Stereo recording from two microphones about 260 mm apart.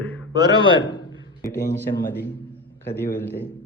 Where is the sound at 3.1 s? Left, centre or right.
Centre.